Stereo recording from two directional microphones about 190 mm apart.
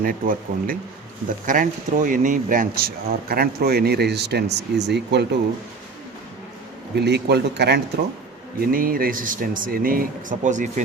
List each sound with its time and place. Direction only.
0.0 s speech: 45° right (ahead or behind)
6.9 s speech: 60° right (ahead or behind)
8.6 s speech: 50° right (ahead or behind)